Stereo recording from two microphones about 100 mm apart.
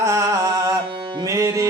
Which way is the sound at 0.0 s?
30° right (ahead or behind).